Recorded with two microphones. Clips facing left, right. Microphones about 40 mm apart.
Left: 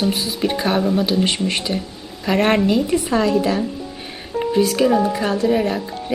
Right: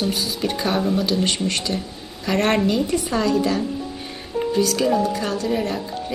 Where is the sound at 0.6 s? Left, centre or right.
Centre.